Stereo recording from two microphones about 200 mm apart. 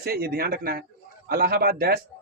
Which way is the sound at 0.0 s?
50° right (ahead or behind).